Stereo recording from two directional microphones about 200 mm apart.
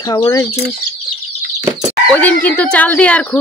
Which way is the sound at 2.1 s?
10° left (ahead or behind).